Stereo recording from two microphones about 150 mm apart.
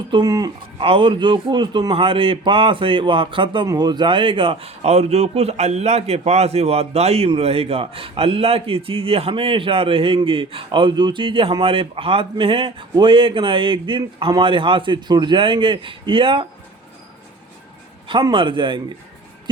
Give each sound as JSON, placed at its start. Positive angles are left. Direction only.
{"t": 0.1, "sound": "a man's voice", "side_deg": -25}
{"t": 18.1, "sound": "a man's voice", "side_deg": -35}